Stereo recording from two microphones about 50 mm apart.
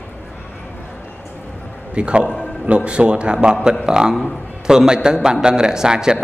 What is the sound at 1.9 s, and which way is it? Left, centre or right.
A man's voice, right.